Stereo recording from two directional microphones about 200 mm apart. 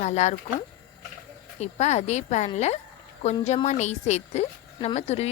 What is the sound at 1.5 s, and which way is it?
Speech, 35° left (ahead or behind).